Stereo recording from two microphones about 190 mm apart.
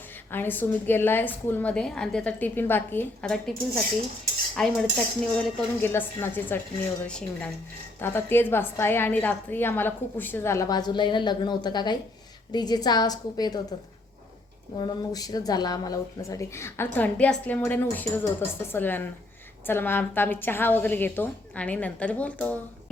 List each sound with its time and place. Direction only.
0.3 s a woman's voice: 10° left (ahead or behind)
14.8 s speech: 20° left (ahead or behind)